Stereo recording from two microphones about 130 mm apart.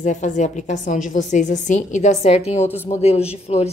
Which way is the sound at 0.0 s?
70° left (ahead or behind).